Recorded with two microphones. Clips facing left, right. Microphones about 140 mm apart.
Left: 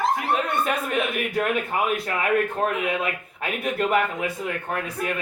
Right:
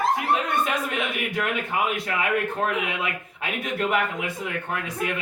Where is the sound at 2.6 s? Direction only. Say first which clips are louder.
Left 2 dB; 40° left (ahead or behind).